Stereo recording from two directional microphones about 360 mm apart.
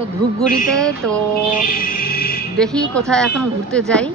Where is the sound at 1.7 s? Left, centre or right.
Left.